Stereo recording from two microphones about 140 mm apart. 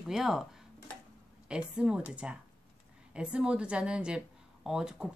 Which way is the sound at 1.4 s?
5° right (ahead or behind).